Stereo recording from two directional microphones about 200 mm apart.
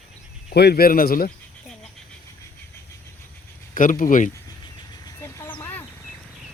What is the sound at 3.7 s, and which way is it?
Speech, 45° left (ahead or behind).